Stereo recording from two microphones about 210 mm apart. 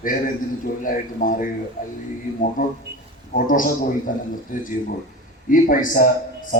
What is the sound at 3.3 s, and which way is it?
Speech, 40° left (ahead or behind).